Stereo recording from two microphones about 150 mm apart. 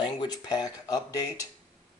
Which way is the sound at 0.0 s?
30° left (ahead or behind).